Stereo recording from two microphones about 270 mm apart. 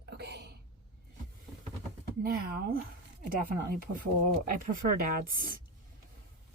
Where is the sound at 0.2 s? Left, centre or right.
Right.